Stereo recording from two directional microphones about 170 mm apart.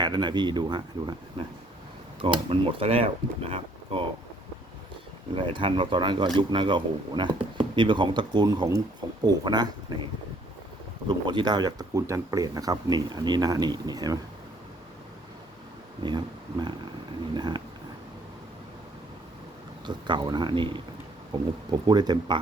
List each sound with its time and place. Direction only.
0.0 s speech: 25° right (ahead or behind)
5.3 s speech: 30° right (ahead or behind)
11.1 s speech: 25° right (ahead or behind)
16.0 s speech: 25° right (ahead or behind)
19.8 s speech: 25° right (ahead or behind)